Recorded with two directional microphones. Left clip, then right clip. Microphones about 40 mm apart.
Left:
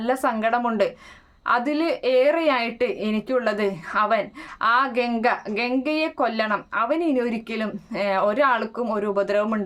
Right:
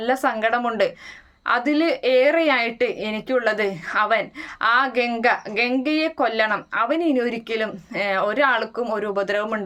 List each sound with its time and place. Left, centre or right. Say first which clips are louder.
0.0 s a woman's voice: right 2 dB; left